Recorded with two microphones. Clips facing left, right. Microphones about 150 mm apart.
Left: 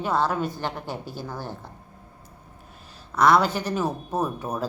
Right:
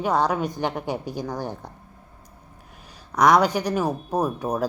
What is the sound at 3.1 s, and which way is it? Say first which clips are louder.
A woman's voice: right 2 dB; 15° right (ahead or behind).